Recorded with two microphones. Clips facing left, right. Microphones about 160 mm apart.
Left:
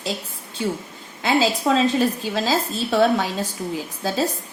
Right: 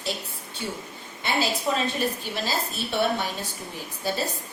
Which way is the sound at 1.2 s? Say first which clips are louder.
Left 7 dB; 90° left.